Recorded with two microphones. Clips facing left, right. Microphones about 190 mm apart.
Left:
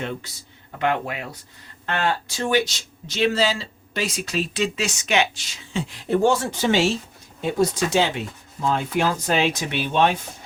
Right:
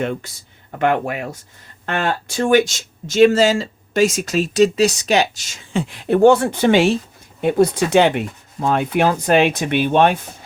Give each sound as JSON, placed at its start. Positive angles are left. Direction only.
{"t": 0.8, "sound": "speech", "side_deg": -50}